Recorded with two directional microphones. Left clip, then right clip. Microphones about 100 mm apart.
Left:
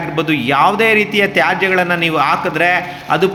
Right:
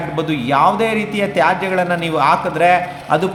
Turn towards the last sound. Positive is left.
turn(degrees=15)  # may be behind; listen again after turning